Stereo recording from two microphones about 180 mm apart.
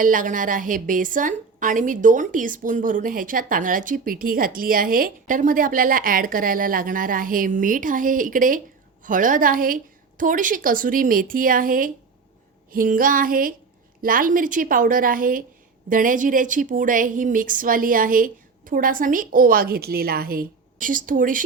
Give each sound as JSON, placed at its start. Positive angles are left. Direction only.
{"t": 0.0, "sound": "a woman's voice", "side_deg": -50}